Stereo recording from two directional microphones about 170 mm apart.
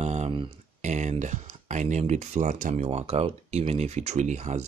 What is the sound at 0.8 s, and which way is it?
Speech, 45° right (ahead or behind).